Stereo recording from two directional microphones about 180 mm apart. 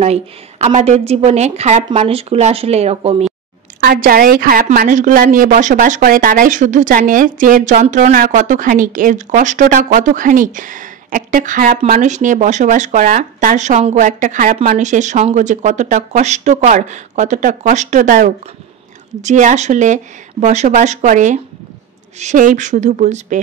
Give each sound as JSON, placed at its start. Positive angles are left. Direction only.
{"t": 0.0, "sound": "speech", "side_deg": -35}
{"t": 3.8, "sound": "a woman's voice", "side_deg": -55}
{"t": 19.2, "sound": "speech", "side_deg": -40}